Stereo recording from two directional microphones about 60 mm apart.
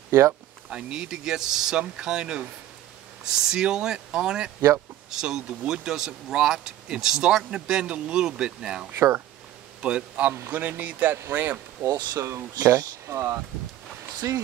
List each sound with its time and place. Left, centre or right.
0.1 s speech: right
0.7 s speech: centre
4.6 s speech: right
5.1 s a man's voice: centre; by 11.6 s right
11.9 s speech: right